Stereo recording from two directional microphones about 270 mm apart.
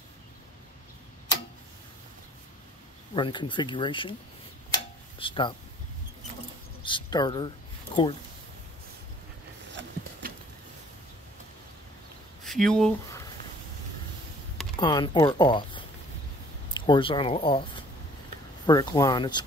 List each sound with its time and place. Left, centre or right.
3.2 s speech: centre
5.2 s speech: centre
6.8 s speech: centre
9.7 s a sound: right
12.4 s speech: centre
14.8 s speech: centre